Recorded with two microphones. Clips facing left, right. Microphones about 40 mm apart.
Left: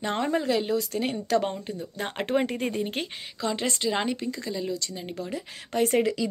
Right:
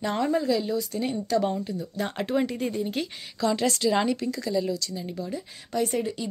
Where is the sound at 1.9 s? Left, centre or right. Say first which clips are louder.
Left 1 dB; left.